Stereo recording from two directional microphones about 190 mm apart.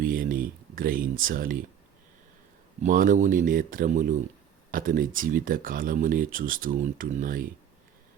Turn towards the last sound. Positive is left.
turn(degrees=-45)  # may be behind; listen again after turning